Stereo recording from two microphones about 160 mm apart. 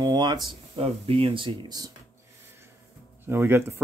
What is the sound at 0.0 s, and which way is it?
Speech, 25° right (ahead or behind).